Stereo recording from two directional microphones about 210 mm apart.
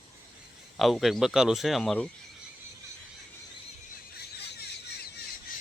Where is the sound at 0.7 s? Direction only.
Centre (ahead or behind).